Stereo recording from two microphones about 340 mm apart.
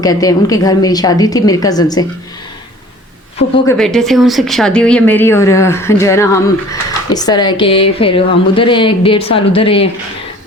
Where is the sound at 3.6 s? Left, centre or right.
Centre.